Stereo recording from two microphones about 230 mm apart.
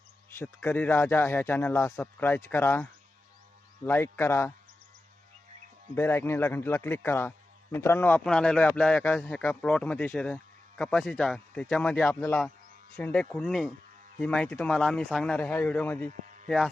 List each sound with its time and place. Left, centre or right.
0.3 s a man's voice: centre
5.9 s a man's voice: centre
16.0 s a sound: right